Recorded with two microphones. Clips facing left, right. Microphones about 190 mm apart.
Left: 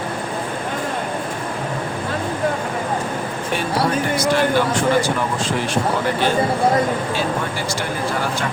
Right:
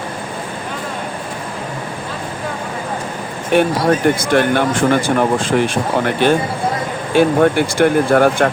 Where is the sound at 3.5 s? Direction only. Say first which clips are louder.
Right 7 dB; 60° right (ahead or behind).